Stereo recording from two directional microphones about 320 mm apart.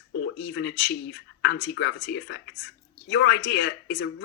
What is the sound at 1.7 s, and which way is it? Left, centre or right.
Speech, left.